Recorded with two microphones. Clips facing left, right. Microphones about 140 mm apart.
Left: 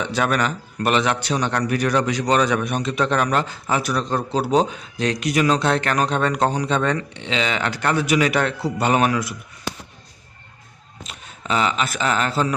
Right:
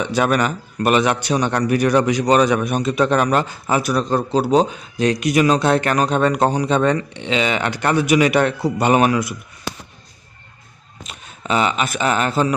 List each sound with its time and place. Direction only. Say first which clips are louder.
0.0 s a man's voice: right 3 dB; 15° right (ahead or behind)
11.0 s speech: right 2 dB; 15° right (ahead or behind)